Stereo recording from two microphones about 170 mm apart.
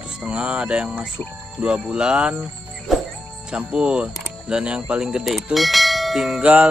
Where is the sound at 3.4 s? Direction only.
5° right (ahead or behind).